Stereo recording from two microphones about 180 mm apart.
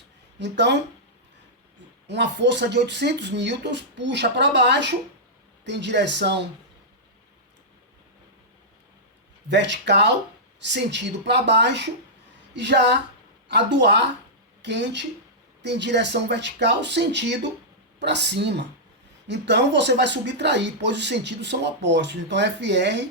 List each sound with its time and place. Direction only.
0.3 s speech: 75° right (ahead or behind)
2.0 s speech: 75° right (ahead or behind)
9.5 s speech: 75° right (ahead or behind)